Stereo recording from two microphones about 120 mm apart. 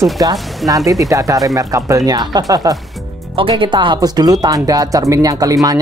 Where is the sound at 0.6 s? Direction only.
30° right (ahead or behind).